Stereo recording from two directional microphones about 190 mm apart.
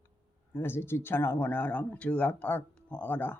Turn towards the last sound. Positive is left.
turn(degrees=10)  # may be behind; listen again after turning